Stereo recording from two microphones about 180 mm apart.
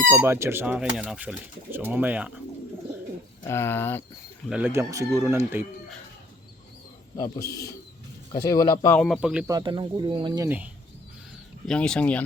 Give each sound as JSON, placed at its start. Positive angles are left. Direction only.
{"t": 0.1, "sound": "speech", "side_deg": -10}
{"t": 3.4, "sound": "speech", "side_deg": 15}
{"t": 4.4, "sound": "speech", "side_deg": -10}
{"t": 7.5, "sound": "speech", "side_deg": 20}
{"t": 9.0, "sound": "speech", "side_deg": 5}
{"t": 9.5, "sound": "speech", "side_deg": -25}
{"t": 11.6, "sound": "speech", "side_deg": 5}